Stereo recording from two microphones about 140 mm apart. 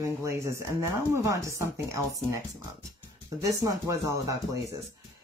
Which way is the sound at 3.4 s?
25° right (ahead or behind).